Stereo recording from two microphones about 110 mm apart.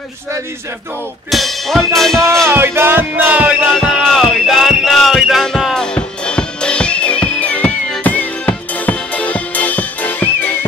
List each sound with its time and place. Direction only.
1.3 s music: centre (ahead or behind)
2.4 s music: 20° right (ahead or behind)
3.7 s music: centre (ahead or behind); by 10.6 s 20° left (ahead or behind)